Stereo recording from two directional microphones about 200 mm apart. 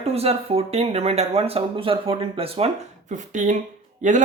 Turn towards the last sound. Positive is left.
turn(degrees=-35)  # may be behind; listen again after turning